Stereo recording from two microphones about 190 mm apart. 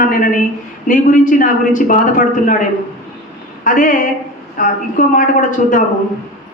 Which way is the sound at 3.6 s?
45° left (ahead or behind).